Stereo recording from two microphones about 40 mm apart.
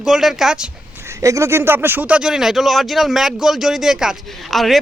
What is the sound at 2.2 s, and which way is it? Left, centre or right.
Speech, centre.